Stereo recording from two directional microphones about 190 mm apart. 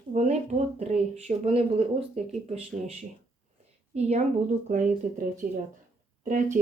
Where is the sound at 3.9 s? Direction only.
35° right (ahead or behind).